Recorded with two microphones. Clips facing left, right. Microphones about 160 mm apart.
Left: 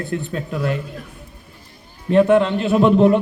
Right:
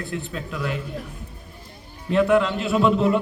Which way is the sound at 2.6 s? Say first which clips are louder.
Left 6 dB; 50° left (ahead or behind).